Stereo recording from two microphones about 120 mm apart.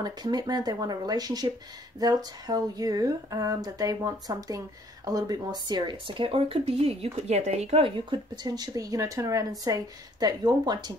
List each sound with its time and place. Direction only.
0.0 s speech: 35° right (ahead or behind); by 6.9 s 55° right (ahead or behind)
7.0 s speech: 65° right (ahead or behind); by 11.0 s 35° right (ahead or behind)